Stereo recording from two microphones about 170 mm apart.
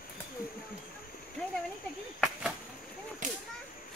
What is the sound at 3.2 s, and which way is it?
Whip, 50° right (ahead or behind).